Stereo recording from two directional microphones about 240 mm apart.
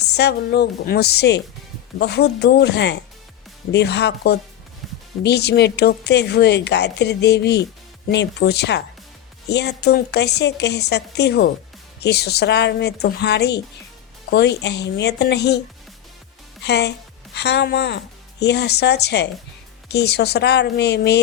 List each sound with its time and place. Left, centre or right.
0.1 s a woman's voice: left
16.6 s a woman's voice: left